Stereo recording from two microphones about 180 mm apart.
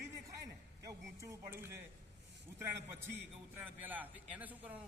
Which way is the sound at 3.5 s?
10° right (ahead or behind).